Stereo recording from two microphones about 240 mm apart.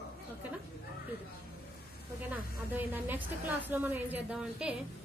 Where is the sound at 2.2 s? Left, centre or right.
Centre.